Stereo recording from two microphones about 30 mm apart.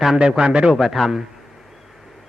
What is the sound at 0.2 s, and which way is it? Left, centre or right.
Speech, right.